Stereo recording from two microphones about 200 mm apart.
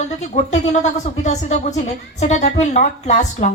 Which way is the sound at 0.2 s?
35° left (ahead or behind).